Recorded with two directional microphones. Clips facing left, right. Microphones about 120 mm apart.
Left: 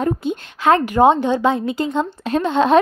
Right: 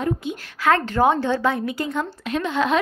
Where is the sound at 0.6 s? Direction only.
20° left (ahead or behind).